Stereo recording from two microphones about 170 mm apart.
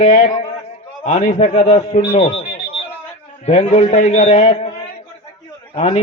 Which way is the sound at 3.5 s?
40° left (ahead or behind).